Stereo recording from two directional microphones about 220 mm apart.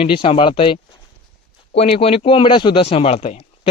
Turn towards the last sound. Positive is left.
turn(degrees=30)  # may be behind; listen again after turning